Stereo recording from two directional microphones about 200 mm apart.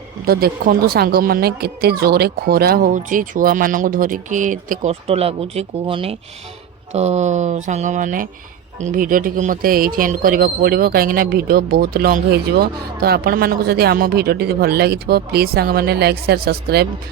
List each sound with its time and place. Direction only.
0.3 s speech: 50° right (ahead or behind)